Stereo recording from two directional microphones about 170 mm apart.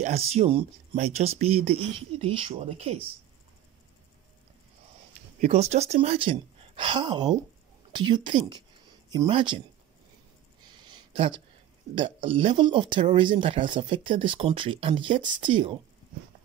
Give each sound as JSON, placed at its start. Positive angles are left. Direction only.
{"t": 0.0, "sound": "speech", "side_deg": -40}
{"t": 5.4, "sound": "speech", "side_deg": -40}
{"t": 10.9, "sound": "a sound", "side_deg": -30}
{"t": 11.9, "sound": "speech", "side_deg": -30}